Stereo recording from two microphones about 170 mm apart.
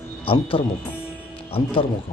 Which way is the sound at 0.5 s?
35° left (ahead or behind).